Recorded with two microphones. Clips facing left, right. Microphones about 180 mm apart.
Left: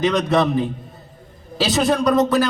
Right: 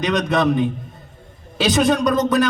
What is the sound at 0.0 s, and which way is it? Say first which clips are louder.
Speech: left 2 dB; centre (ahead or behind).